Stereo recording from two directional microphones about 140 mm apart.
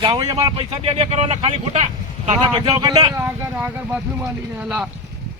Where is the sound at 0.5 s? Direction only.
45° right (ahead or behind).